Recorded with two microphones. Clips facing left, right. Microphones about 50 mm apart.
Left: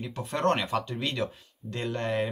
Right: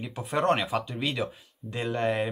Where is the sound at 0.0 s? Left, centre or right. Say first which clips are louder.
Right 1 dB; centre.